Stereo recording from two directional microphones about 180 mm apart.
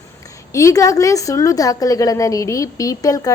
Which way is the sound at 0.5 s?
15° left (ahead or behind).